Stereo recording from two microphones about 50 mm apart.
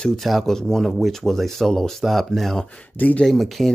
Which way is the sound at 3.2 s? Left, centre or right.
Centre.